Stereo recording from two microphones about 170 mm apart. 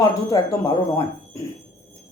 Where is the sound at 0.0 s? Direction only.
20° left (ahead or behind).